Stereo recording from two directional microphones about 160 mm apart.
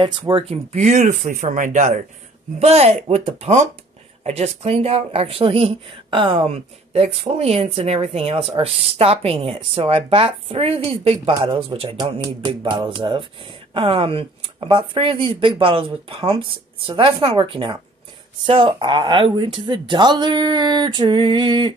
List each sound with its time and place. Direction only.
0.3 s speech: 40° right (ahead or behind)